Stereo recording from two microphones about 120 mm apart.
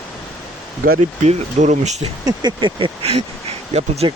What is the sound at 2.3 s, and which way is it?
Speech, 40° right (ahead or behind).